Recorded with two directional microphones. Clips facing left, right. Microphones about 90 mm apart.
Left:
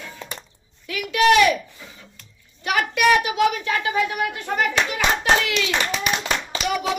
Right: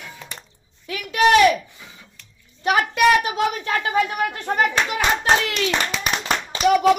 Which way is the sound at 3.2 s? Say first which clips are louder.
Left 2 dB; 35° right (ahead or behind).